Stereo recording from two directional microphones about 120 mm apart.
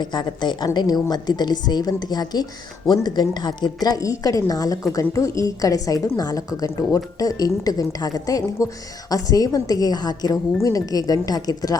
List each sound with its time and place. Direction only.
0.0 s a woman's voice: 40° left (ahead or behind)